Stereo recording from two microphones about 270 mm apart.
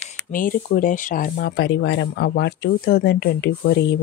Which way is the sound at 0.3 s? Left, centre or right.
Left.